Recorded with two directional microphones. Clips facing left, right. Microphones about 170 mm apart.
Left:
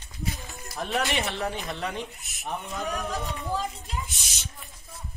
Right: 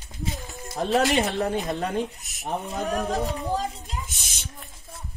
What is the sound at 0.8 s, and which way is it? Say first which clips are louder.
Speech: right 7 dB; 35° right (ahead or behind).